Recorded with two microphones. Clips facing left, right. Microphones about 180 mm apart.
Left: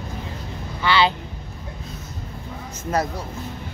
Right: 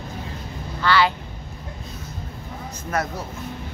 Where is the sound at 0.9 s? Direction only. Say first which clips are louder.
Even; 25° left (ahead or behind).